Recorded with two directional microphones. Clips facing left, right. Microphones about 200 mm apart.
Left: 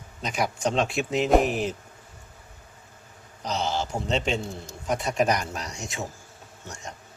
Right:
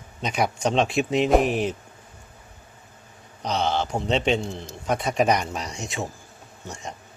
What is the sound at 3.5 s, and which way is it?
Speech, 60° right (ahead or behind).